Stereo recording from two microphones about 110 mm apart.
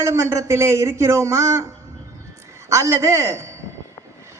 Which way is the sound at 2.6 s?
30° right (ahead or behind).